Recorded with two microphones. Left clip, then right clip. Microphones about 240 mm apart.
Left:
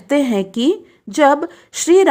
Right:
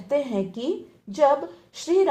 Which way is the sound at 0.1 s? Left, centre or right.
Left.